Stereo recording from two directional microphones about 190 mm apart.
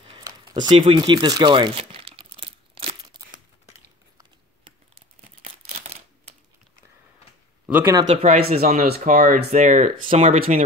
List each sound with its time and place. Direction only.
0.0 s crumpling: 25° right (ahead or behind)
5.4 s a sound: 35° right (ahead or behind)
7.6 s speech: 10° right (ahead or behind)
8.1 s speech: 40° right (ahead or behind)
8.5 s speech: 50° right (ahead or behind); by 10.4 s 35° right (ahead or behind)